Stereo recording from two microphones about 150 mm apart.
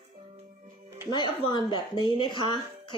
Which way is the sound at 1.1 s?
30° left (ahead or behind).